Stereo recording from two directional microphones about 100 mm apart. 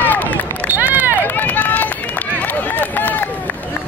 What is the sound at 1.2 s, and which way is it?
Run, 15° left (ahead or behind).